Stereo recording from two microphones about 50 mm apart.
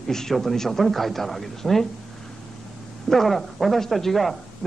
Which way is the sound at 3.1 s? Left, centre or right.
Centre.